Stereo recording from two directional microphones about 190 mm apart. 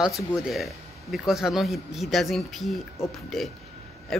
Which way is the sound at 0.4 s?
Centre (ahead or behind).